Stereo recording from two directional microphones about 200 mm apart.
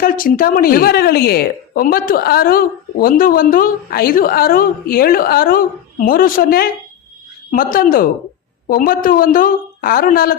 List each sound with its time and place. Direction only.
0.0 s a woman's voice: 45° left (ahead or behind)